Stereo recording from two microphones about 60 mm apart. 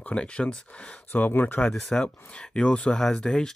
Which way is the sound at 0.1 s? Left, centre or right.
Centre.